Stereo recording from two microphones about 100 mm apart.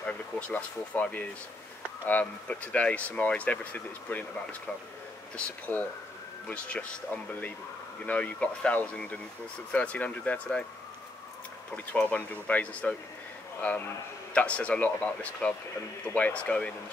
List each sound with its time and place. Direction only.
0.0 s speech: 15° left (ahead or behind)
11.7 s speech: 15° left (ahead or behind)